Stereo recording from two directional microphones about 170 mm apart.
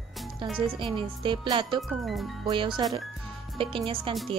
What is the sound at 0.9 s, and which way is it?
Music, 30° right (ahead or behind).